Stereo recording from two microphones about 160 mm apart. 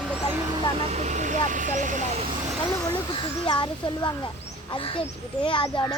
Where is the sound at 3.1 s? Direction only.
30° left (ahead or behind).